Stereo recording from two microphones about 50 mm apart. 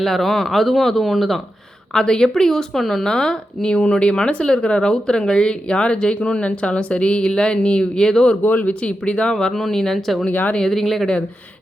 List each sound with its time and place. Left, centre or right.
0.0 s speech: centre
1.9 s speech: centre
8.4 s speech: left
9.3 s speech: centre